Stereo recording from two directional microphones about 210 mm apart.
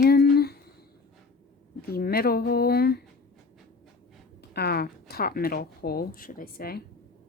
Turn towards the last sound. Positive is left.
turn(degrees=45)  # may be behind; listen again after turning